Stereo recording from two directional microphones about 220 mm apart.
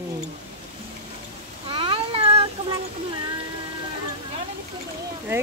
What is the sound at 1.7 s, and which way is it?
Cat, 25° right (ahead or behind).